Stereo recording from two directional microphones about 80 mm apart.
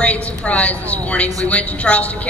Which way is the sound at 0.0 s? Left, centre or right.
Centre.